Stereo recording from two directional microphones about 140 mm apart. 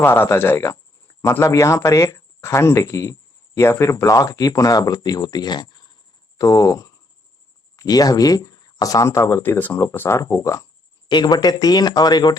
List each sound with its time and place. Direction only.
0.0 s speech: 15° left (ahead or behind)